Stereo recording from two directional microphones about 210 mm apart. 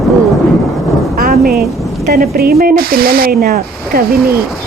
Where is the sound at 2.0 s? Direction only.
45° right (ahead or behind).